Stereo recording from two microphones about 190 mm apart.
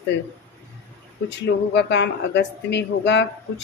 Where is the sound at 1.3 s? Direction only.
65° left (ahead or behind).